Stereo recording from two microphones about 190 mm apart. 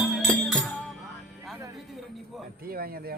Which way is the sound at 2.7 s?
50° right (ahead or behind).